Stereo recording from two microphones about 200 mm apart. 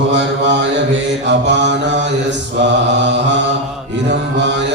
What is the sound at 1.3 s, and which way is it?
Mantra, 60° right (ahead or behind).